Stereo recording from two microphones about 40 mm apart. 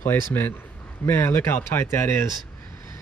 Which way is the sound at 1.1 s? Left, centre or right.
Left.